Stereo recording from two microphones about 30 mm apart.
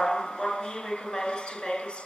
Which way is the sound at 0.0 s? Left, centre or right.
Left.